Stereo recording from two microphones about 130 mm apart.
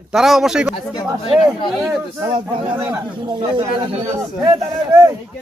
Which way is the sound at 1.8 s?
5° right (ahead or behind).